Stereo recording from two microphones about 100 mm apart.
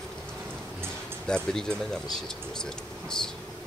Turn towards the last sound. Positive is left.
turn(degrees=5)  # may be behind; listen again after turning